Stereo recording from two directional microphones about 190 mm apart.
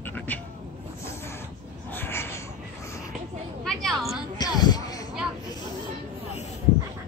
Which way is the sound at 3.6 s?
Centre (ahead or behind).